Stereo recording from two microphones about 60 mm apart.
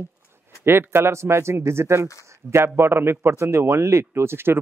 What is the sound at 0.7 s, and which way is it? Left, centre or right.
A man's voice, right.